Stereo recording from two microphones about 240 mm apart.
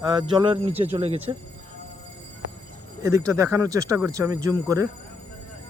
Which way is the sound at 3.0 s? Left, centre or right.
Centre.